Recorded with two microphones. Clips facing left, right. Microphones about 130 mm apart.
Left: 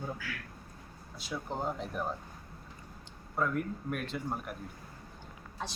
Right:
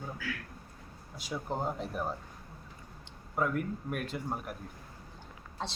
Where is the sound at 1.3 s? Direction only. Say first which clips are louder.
Right 1 dB; 5° right (ahead or behind).